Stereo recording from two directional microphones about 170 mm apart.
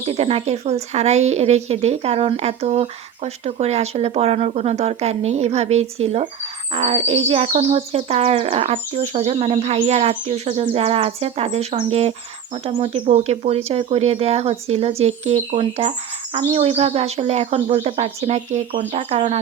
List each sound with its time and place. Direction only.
0.0 s speech: 35° right (ahead or behind)